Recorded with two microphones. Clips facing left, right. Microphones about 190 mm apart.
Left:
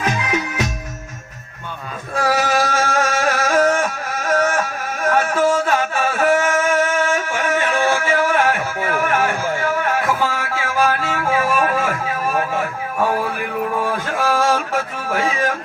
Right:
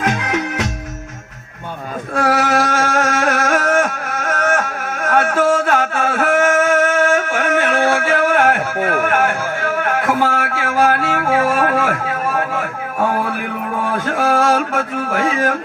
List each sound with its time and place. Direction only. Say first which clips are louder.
0.1 s music: right 2 dB; 60° right (ahead or behind)
2.1 s a sound: right 2 dB; 60° right (ahead or behind)
14.2 s music: right 3 dB; 60° right (ahead or behind)